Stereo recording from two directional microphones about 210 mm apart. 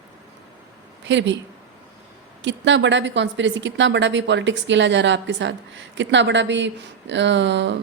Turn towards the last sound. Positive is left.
turn(degrees=-60)  # may be behind; listen again after turning